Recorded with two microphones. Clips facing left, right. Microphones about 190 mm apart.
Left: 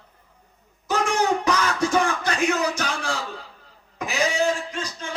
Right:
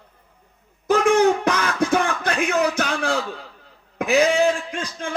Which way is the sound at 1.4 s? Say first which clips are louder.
Right 1 dB; 55° right (ahead or behind).